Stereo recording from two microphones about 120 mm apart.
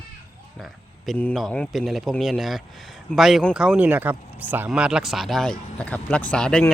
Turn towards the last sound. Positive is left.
turn(degrees=5)  # may be behind; listen again after turning